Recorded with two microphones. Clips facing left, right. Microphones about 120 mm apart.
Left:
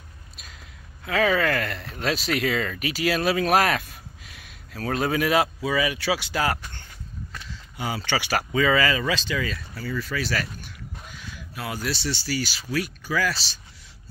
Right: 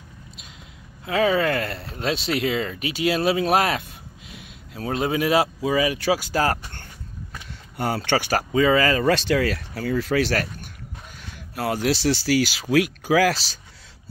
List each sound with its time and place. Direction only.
1.0 s speech: 25° right (ahead or behind); by 8.4 s 50° right (ahead or behind)
8.4 s speech: 30° right (ahead or behind)
9.1 s speech: 65° right (ahead or behind)
10.4 s a sound: 50° right (ahead or behind); by 12.4 s 90° right
12.7 s speech: 90° right